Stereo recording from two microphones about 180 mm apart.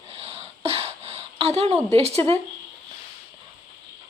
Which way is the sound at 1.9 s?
35° right (ahead or behind).